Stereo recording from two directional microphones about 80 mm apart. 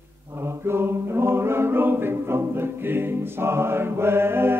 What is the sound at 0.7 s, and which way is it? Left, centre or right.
A capella, right.